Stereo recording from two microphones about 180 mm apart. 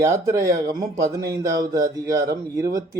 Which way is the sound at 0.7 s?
20° right (ahead or behind).